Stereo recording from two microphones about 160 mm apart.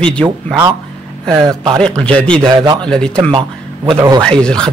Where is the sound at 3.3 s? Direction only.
30° right (ahead or behind).